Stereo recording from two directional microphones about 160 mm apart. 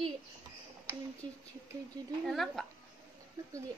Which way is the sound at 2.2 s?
Centre (ahead or behind).